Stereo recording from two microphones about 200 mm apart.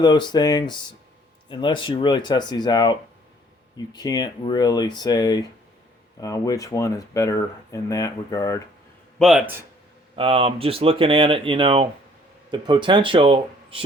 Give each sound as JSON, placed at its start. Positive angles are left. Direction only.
{"t": 0.0, "sound": "speech", "side_deg": 20}
{"t": 9.1, "sound": "speech", "side_deg": 0}
{"t": 10.2, "sound": "speech", "side_deg": -25}